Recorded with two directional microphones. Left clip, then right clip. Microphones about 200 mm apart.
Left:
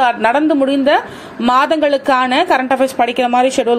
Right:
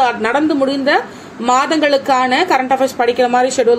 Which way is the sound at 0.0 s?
20° left (ahead or behind).